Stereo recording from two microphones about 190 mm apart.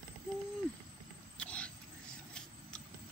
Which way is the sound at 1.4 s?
5° left (ahead or behind).